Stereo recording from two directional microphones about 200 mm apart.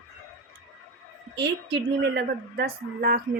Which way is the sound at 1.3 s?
60° right (ahead or behind).